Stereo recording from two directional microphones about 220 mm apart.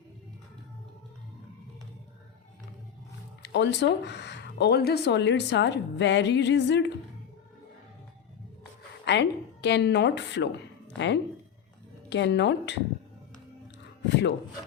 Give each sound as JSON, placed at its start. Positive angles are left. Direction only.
{"t": 3.4, "sound": "speech", "side_deg": 50}
{"t": 9.0, "sound": "speech", "side_deg": 50}
{"t": 14.1, "sound": "speech", "side_deg": 50}